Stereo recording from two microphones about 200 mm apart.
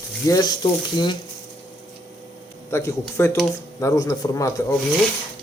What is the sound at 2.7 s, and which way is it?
Speech, 15° left (ahead or behind).